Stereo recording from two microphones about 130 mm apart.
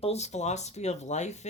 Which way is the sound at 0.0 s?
55° left (ahead or behind).